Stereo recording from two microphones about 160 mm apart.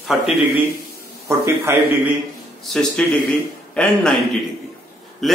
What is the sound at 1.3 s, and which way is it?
Speech, 15° right (ahead or behind).